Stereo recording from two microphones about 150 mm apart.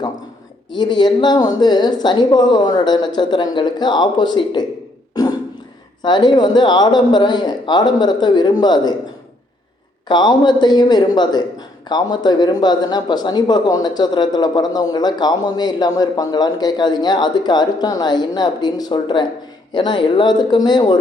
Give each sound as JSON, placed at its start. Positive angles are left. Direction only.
{"t": 0.7, "sound": "speech", "side_deg": 30}
{"t": 5.2, "sound": "beatboxing", "side_deg": 25}
{"t": 6.0, "sound": "speech", "side_deg": 30}
{"t": 10.1, "sound": "speech", "side_deg": 30}